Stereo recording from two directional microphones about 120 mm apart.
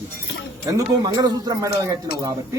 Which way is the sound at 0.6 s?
30° right (ahead or behind).